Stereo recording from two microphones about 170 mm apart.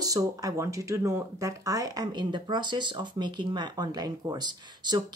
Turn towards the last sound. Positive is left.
turn(degrees=-25)  # may be behind; listen again after turning